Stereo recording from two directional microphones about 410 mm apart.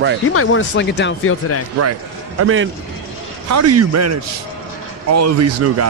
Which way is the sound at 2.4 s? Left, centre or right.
Right.